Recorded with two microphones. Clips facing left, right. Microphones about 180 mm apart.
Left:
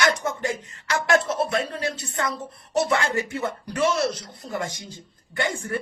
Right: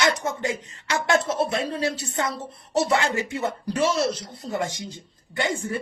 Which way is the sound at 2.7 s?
25° right (ahead or behind).